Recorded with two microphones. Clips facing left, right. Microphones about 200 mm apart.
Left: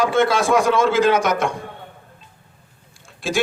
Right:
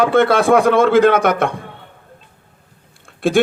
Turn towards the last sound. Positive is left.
turn(degrees=-55)  # may be behind; listen again after turning